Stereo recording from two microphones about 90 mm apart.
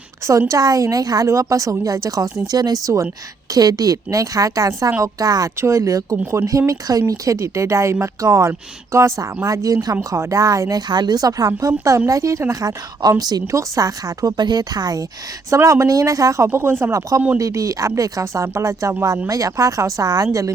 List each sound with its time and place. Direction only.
0.3 s speech: 40° right (ahead or behind)
15.4 s speech: 35° right (ahead or behind)